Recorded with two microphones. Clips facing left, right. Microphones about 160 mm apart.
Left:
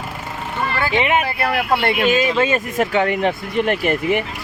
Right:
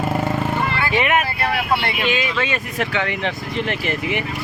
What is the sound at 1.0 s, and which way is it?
Speech, 25° left (ahead or behind).